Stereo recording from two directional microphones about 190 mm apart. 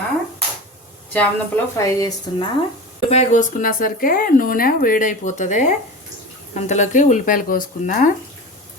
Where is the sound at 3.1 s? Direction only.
35° left (ahead or behind).